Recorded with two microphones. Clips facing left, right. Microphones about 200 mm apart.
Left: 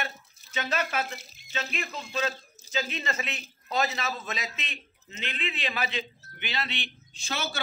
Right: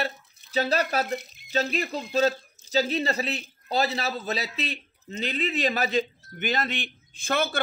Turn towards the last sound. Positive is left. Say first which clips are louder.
# right 8 dB
turn(degrees=-55)  # may be behind; listen again after turning